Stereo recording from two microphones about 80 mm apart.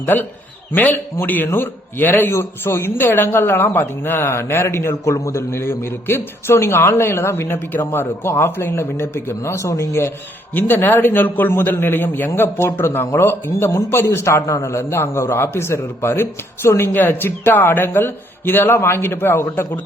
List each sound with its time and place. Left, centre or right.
0.0 s a man's voice: left
10.5 s a man's voice: left